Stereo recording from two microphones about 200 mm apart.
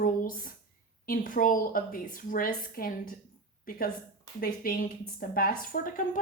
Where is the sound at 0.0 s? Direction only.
45° left (ahead or behind).